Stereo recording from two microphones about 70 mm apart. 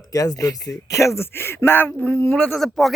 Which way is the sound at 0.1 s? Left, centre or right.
Left.